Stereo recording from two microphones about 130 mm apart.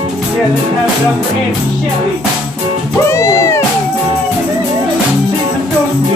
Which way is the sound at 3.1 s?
20° left (ahead or behind).